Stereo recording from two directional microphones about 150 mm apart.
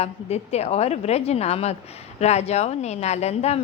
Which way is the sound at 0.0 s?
45° left (ahead or behind).